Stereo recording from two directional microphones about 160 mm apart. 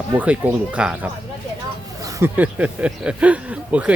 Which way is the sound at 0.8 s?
5° right (ahead or behind).